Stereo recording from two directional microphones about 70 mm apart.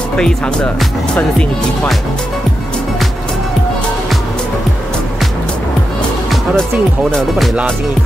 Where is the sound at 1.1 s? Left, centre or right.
Left.